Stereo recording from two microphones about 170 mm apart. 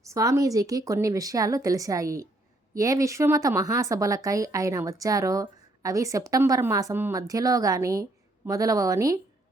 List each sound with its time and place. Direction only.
0.0 s speech: 20° right (ahead or behind)